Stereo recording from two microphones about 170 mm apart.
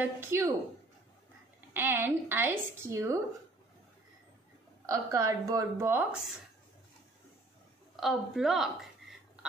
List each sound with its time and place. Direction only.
0.0 s speech: 15° right (ahead or behind)
1.7 s speech: 10° right (ahead or behind)
4.8 s a woman's voice: 20° right (ahead or behind)
7.9 s a woman's voice: centre (ahead or behind)